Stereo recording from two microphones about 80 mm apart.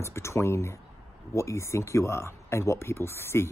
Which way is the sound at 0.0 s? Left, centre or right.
Left.